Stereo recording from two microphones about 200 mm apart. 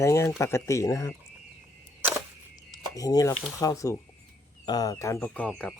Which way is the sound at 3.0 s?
15° left (ahead or behind).